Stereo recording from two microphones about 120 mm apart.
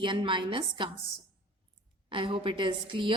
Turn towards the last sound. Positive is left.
turn(degrees=-45)  # may be behind; listen again after turning